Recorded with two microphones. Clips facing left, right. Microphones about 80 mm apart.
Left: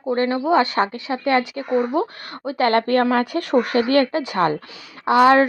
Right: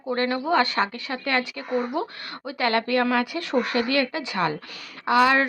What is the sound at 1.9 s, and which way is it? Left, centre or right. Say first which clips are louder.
Speech: left 6 dB; left.